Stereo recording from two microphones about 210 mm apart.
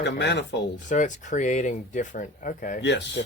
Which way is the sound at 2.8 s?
55° left (ahead or behind).